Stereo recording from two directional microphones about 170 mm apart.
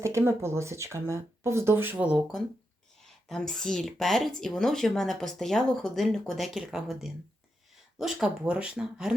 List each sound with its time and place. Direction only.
0.0 s speech: 15° right (ahead or behind)